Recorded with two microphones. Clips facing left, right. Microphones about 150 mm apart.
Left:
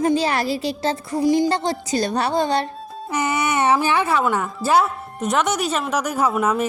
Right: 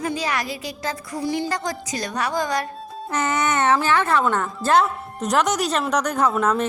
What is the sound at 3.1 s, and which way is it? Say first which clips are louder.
Speech: left 1 dB; 10° left (ahead or behind).